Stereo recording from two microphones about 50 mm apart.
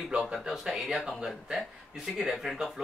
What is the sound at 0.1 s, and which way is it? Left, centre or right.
Speech, centre.